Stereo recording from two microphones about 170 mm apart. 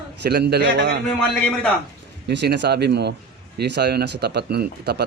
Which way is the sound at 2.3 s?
90° right.